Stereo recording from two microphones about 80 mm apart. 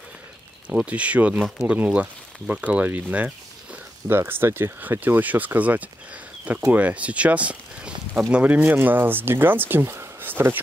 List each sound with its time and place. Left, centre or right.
0.7 s speech: centre